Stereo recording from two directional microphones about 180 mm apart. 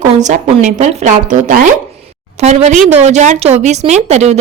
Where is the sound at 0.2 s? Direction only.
40° right (ahead or behind).